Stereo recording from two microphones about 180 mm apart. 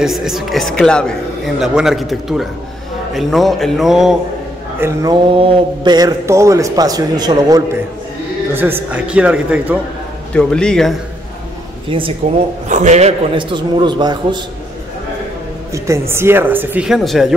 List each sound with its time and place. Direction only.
0.0 s a man's voice: centre (ahead or behind)
4.7 s speech: 15° right (ahead or behind)
5.1 s a man's voice: 25° right (ahead or behind)
8.5 s speech: 10° right (ahead or behind)
10.3 s a man's voice: 5° left (ahead or behind)
11.9 s a man's voice: 30° right (ahead or behind)
12.6 s a man's voice: 40° right (ahead or behind); by 14.4 s 25° right (ahead or behind)
15.7 s speech: 15° right (ahead or behind)